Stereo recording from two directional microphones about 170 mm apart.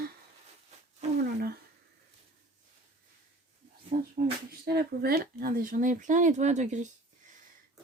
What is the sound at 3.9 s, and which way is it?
Speech, 50° right (ahead or behind).